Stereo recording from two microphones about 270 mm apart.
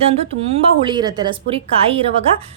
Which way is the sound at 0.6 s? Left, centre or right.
Centre.